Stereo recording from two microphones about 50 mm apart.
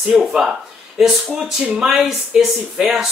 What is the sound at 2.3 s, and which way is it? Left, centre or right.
Speech, centre.